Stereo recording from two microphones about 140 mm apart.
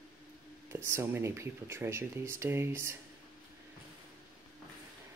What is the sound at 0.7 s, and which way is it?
Speech, 20° right (ahead or behind).